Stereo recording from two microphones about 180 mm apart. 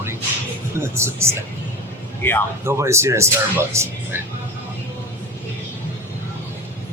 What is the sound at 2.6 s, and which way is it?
Speech, 15° right (ahead or behind).